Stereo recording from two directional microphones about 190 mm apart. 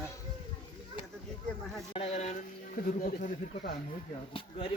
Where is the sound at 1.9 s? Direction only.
30° left (ahead or behind).